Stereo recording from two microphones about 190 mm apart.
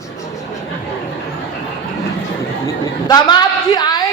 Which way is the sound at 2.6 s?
20° left (ahead or behind).